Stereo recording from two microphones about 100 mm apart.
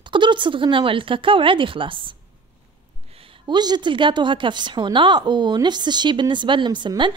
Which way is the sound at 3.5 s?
45° right (ahead or behind).